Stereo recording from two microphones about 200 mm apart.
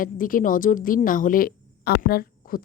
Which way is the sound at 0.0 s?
45° left (ahead or behind).